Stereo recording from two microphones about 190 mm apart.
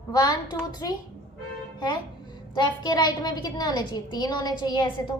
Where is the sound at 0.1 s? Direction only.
20° left (ahead or behind).